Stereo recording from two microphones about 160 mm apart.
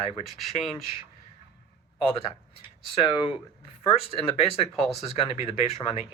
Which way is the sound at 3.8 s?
35° left (ahead or behind).